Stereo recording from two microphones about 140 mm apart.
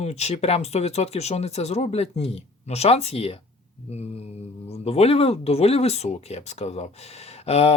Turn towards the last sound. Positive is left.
turn(degrees=50)  # may be behind; listen again after turning